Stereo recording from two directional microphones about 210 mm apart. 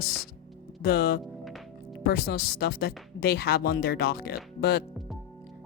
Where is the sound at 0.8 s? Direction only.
50° left (ahead or behind).